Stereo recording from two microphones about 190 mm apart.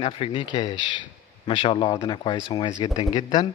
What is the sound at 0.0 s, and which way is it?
Speech, 30° left (ahead or behind).